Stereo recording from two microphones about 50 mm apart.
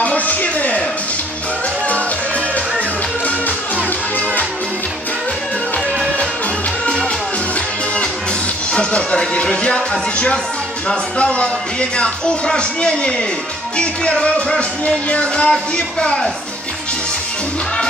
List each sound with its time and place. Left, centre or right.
0.0 s a sound: left
8.7 s music: left
15.5 s a man's voice: centre